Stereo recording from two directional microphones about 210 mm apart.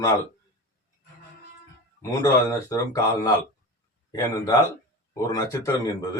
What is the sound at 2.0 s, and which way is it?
Speech, 15° left (ahead or behind).